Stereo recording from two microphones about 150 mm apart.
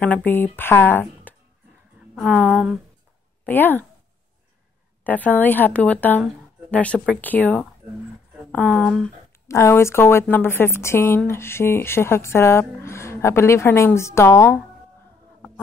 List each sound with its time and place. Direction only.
0.0 s a woman's voice: 10° left (ahead or behind)
2.1 s a woman's voice: 10° right (ahead or behind)
3.4 s a woman's voice: 10° left (ahead or behind)
5.0 s a woman's voice: 10° left (ahead or behind)
9.5 s a woman's voice: 20° left (ahead or behind)